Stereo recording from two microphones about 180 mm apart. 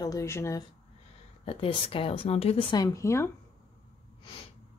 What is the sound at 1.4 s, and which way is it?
Speech, 30° left (ahead or behind).